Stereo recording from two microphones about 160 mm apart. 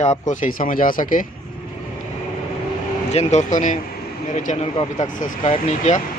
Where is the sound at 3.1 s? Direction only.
45° left (ahead or behind).